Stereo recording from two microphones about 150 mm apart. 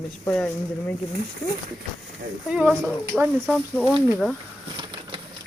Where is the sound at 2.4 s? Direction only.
5° right (ahead or behind).